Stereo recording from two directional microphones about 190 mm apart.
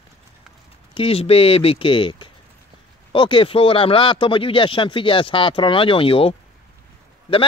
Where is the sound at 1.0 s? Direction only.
30° left (ahead or behind).